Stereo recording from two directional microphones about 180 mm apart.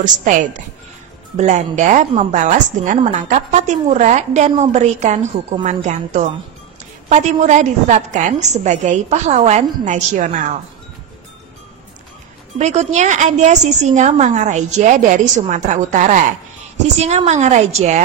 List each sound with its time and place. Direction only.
0.0 s a woman's voice: 45° right (ahead or behind)
12.5 s speech: 40° right (ahead or behind)